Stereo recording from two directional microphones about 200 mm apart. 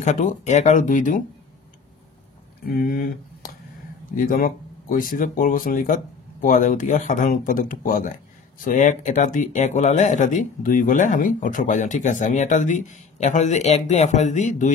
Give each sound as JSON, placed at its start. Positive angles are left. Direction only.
{"t": 0.0, "sound": "speech", "side_deg": 40}
{"t": 2.6, "sound": "speech", "side_deg": 50}